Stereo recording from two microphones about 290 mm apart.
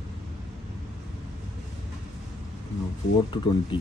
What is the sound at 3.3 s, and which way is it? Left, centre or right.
Speech, centre.